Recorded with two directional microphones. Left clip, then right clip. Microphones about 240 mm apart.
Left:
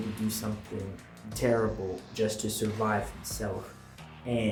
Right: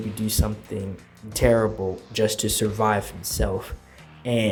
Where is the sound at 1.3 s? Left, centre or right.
Right.